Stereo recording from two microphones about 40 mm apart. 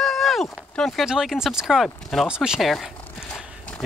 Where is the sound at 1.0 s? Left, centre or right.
Centre.